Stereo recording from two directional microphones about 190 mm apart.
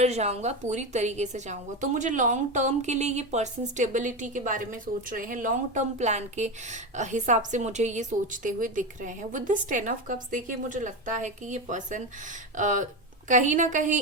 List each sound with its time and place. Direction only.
0.0 s a woman's voice: 35° right (ahead or behind)